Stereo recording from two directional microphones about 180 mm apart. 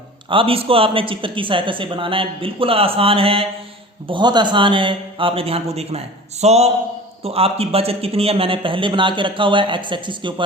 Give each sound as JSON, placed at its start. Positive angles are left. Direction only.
{"t": 0.3, "sound": "a man's voice", "side_deg": -30}